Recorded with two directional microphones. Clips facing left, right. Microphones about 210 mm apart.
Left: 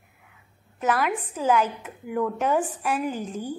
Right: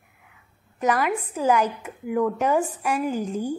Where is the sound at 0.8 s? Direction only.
10° right (ahead or behind).